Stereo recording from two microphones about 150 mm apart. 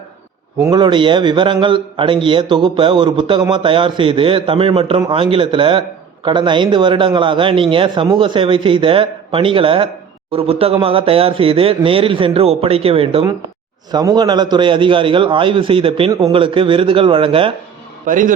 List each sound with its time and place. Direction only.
0.6 s a man's voice: 30° right (ahead or behind)
13.9 s a man's voice: 30° right (ahead or behind)
18.0 s a man's voice: 60° right (ahead or behind)